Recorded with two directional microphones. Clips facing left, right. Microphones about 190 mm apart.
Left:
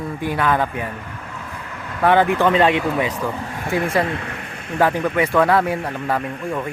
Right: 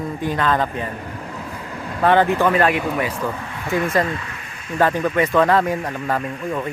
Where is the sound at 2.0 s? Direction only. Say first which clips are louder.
Even; 10° left (ahead or behind).